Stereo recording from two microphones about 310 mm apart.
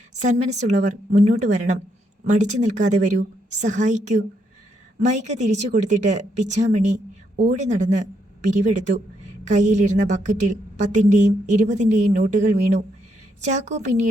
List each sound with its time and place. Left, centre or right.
0.1 s a woman's voice: right